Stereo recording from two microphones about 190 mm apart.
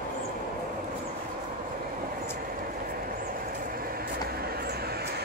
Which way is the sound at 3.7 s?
50° right (ahead or behind).